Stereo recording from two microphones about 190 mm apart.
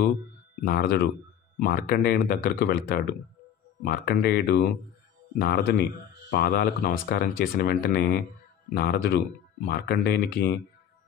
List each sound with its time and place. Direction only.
0.6 s speech: 50° left (ahead or behind)